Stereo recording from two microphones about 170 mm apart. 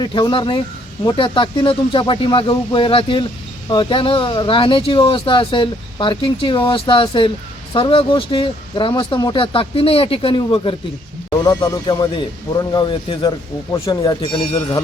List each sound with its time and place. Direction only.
0.0 s speech: 25° left (ahead or behind)